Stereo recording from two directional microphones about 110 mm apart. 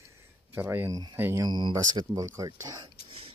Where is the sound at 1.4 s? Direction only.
40° right (ahead or behind).